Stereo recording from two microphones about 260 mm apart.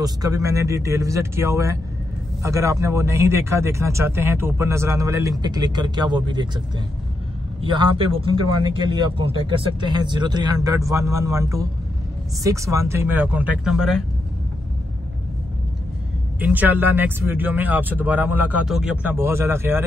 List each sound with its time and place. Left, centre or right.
0.0 s speech: centre
7.6 s speech: centre
16.3 s speech: centre